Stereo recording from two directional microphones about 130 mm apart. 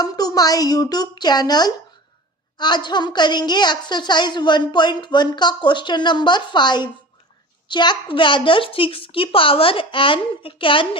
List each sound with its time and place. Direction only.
0.0 s a woman's voice: 30° left (ahead or behind)